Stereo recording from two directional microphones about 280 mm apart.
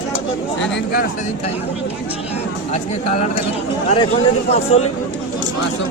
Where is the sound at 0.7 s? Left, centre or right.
Left.